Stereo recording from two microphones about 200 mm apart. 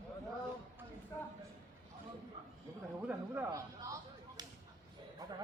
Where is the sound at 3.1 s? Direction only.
10° right (ahead or behind).